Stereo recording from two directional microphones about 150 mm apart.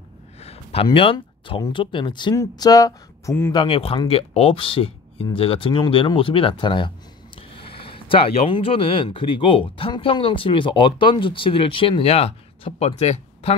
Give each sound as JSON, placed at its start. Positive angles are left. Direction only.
{"t": 0.4, "sound": "a sound", "side_deg": 45}
{"t": 0.8, "sound": "speech", "side_deg": 35}
{"t": 3.5, "sound": "speech", "side_deg": 40}